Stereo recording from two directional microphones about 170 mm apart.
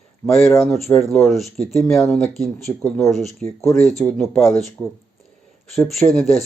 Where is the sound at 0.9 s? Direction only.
Centre (ahead or behind).